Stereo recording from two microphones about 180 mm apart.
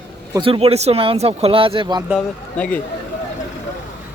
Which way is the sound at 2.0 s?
5° left (ahead or behind).